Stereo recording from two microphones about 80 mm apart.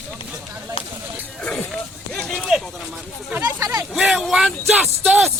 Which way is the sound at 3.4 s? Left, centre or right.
Right.